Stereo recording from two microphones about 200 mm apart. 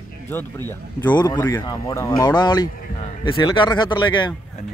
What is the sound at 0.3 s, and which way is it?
Speech, 10° left (ahead or behind).